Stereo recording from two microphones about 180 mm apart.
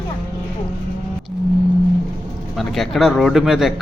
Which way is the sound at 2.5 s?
Centre (ahead or behind).